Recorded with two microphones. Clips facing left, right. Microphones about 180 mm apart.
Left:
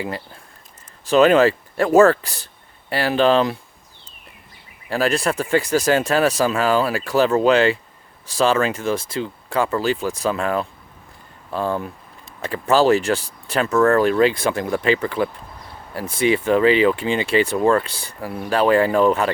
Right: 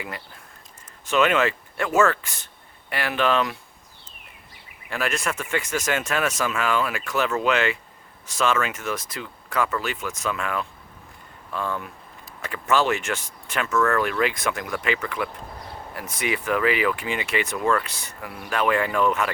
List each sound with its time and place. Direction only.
1.0 s speech: 35° left (ahead or behind)
4.9 s speech: 35° left (ahead or behind)